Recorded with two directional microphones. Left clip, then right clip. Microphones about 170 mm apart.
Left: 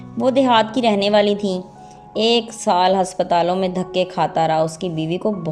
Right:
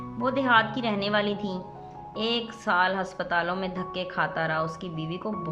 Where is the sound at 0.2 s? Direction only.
25° left (ahead or behind).